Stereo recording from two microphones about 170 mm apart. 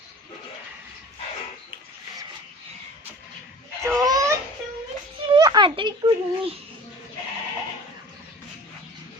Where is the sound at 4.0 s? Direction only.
20° right (ahead or behind).